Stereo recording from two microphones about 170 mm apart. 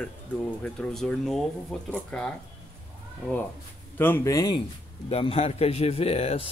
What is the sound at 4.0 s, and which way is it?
Speech, 15° left (ahead or behind).